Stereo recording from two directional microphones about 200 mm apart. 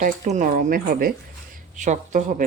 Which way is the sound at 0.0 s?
40° right (ahead or behind).